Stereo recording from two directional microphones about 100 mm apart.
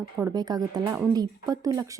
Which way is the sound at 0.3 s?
40° right (ahead or behind).